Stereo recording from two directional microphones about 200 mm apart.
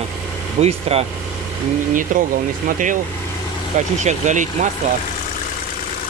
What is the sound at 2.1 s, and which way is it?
Speech, 40° right (ahead or behind).